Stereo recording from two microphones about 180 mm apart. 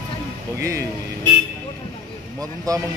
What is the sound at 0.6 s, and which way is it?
Speech, 15° right (ahead or behind).